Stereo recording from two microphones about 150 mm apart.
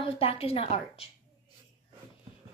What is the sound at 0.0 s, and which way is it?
A woman's voice, 40° left (ahead or behind).